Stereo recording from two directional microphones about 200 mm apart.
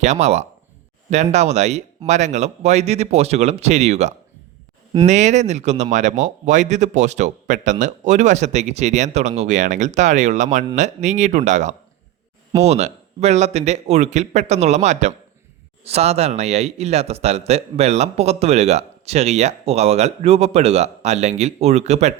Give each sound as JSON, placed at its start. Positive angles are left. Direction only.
{"t": 0.0, "sound": "a man's voice", "side_deg": -35}